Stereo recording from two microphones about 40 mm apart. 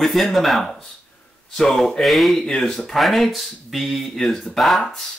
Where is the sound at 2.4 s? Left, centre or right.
Centre.